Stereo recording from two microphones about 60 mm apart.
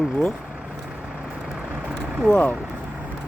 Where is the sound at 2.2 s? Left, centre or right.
Centre.